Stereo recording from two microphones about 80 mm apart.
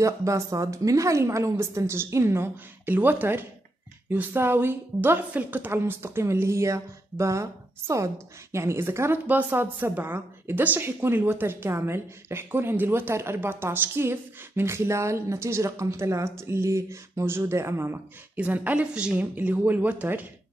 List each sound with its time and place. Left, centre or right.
0.0 s a woman's voice: right
18.3 s a woman's voice: centre